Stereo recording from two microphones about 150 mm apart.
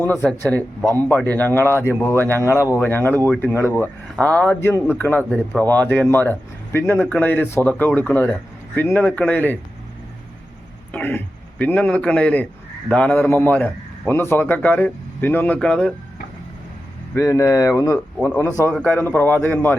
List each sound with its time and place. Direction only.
0.1 s speech: 10° left (ahead or behind)
10.9 s a man's voice: 10° left (ahead or behind)
17.2 s speech: 20° left (ahead or behind)